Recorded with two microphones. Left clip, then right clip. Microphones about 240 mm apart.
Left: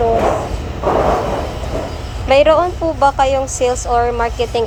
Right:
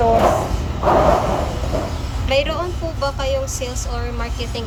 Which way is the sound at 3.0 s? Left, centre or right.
Centre.